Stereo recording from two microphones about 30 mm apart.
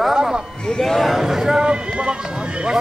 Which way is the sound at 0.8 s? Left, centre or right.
Centre.